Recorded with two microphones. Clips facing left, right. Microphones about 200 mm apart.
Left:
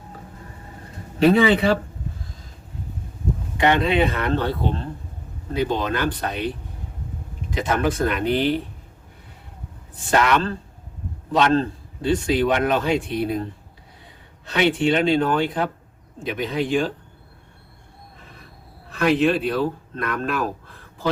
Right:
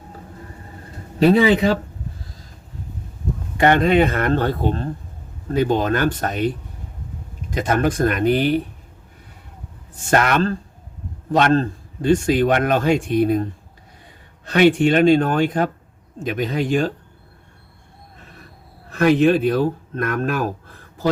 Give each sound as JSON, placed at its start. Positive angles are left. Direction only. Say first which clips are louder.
{"t": 3.6, "sound": "speech", "louder": "right 4 dB", "side_deg": -45}
{"t": 7.5, "sound": "speech", "louder": "right 3 dB", "side_deg": -45}
{"t": 10.0, "sound": "speech", "louder": "right 2 dB", "side_deg": -50}
{"t": 14.4, "sound": "speech", "louder": "right 5 dB", "side_deg": -50}
{"t": 18.9, "sound": "speech", "louder": "right 4 dB", "side_deg": -45}